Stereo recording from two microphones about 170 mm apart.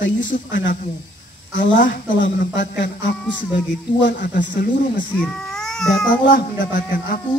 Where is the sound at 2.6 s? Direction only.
75° left (ahead or behind).